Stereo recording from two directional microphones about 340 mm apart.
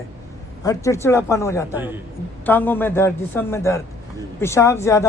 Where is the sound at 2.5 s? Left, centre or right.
Centre.